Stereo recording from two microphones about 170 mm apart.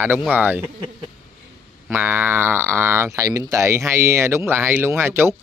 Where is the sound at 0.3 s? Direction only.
10° right (ahead or behind).